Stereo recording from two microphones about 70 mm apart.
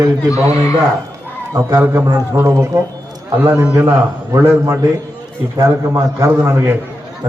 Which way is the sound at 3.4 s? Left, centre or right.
Right.